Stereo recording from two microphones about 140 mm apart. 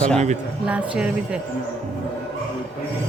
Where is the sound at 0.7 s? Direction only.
10° right (ahead or behind).